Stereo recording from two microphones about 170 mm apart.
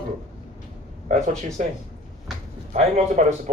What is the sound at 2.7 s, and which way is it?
Speech, 45° right (ahead or behind).